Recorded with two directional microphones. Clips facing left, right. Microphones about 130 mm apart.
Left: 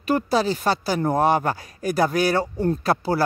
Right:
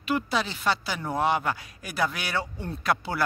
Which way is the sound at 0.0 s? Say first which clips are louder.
Left 6 dB; 40° left (ahead or behind).